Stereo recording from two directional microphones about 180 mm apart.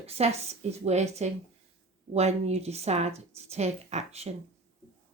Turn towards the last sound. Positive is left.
turn(degrees=-40)  # may be behind; listen again after turning